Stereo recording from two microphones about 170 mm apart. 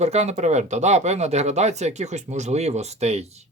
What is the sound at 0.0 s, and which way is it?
Speech, 40° right (ahead or behind).